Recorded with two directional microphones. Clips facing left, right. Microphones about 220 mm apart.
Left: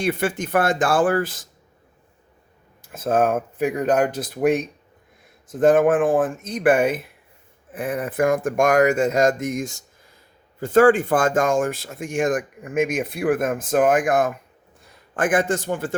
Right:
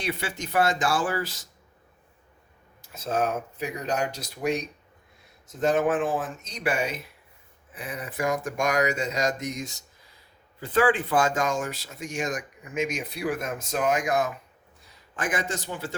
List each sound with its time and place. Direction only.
0.0 s speech: 50° left (ahead or behind)
2.9 s a man's voice: 50° left (ahead or behind)